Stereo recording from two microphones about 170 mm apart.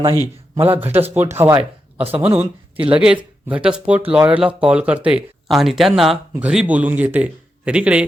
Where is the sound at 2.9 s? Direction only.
5° right (ahead or behind).